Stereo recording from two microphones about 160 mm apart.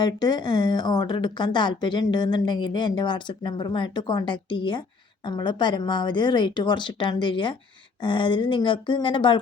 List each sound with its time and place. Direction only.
0.0 s speech: 25° left (ahead or behind)